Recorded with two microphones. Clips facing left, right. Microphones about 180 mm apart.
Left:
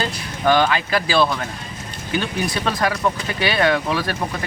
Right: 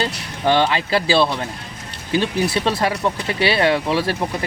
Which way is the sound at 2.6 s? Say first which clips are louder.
Right 1 dB; 25° right (ahead or behind).